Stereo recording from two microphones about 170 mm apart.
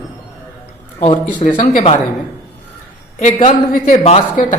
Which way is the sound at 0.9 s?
30° left (ahead or behind).